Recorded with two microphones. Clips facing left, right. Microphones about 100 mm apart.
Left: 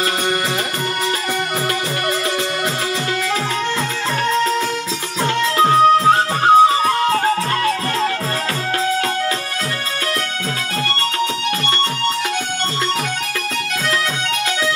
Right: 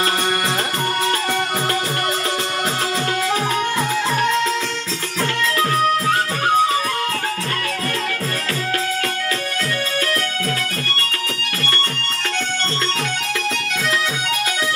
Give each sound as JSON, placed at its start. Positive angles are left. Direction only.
{"t": 5.6, "sound": "music", "side_deg": 25}